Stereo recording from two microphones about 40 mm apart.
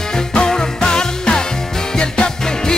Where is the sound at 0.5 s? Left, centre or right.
Centre.